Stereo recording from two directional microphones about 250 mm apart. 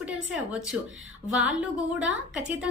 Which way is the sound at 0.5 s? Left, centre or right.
Centre.